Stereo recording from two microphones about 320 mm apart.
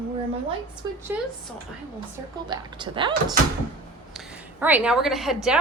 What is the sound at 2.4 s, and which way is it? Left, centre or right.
Speech, centre.